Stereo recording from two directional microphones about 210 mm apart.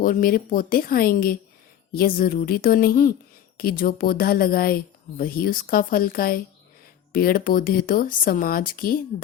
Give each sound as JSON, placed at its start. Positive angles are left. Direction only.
{"t": 0.0, "sound": "speech", "side_deg": 40}